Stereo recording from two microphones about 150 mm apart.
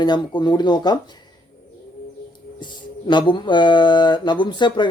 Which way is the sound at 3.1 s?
30° left (ahead or behind).